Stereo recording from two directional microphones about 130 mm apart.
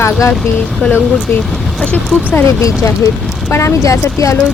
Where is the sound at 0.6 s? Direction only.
5° left (ahead or behind).